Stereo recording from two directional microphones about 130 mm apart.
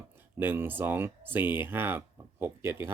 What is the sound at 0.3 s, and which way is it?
Speech, 15° right (ahead or behind).